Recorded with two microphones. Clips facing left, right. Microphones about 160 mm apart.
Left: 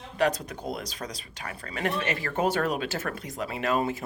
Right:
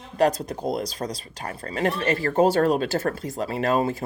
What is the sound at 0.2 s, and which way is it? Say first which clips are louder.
Speech: right 5 dB; 35° right (ahead or behind).